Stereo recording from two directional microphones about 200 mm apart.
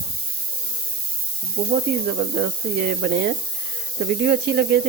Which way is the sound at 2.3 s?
50° right (ahead or behind).